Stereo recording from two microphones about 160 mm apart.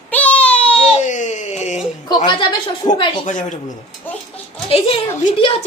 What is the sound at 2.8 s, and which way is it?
Speech, 25° left (ahead or behind).